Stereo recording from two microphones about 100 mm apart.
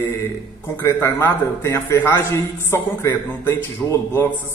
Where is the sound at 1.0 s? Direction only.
25° left (ahead or behind).